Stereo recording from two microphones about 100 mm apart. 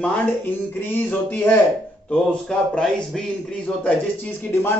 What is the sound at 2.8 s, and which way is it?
Speech, 5° left (ahead or behind).